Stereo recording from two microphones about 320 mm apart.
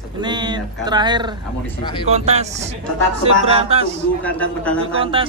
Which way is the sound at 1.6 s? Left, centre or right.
Centre.